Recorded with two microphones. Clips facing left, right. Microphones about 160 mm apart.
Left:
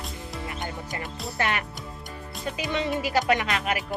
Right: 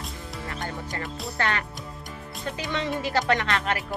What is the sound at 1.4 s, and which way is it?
Music, 15° left (ahead or behind).